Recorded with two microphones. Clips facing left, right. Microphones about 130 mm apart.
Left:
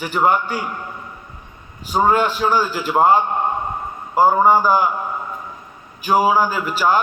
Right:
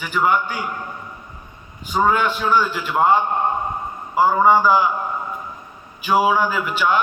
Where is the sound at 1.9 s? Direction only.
35° left (ahead or behind).